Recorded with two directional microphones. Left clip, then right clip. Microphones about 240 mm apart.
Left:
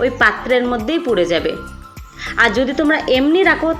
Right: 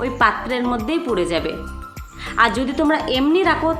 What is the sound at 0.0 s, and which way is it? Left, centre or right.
A woman's voice, centre.